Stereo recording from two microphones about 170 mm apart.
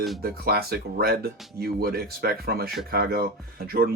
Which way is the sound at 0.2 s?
65° right (ahead or behind).